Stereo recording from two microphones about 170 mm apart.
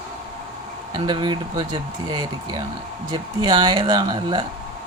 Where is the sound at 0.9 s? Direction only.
25° right (ahead or behind).